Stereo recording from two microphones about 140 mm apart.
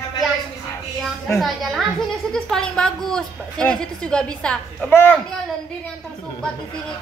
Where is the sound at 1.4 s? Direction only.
Centre (ahead or behind).